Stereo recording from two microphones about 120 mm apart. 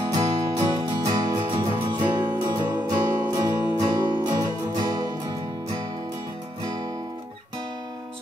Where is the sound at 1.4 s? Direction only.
40° right (ahead or behind).